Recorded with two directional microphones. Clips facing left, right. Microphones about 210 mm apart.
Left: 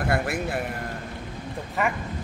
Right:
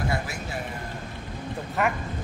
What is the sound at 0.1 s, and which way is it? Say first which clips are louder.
Speech: left 5 dB; 60° left (ahead or behind).